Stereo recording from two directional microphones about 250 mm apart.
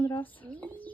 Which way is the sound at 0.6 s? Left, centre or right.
Centre.